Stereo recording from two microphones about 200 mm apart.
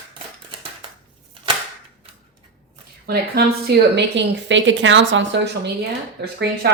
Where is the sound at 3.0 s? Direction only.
50° right (ahead or behind).